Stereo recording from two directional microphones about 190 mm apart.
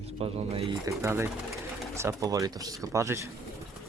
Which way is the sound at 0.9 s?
15° right (ahead or behind).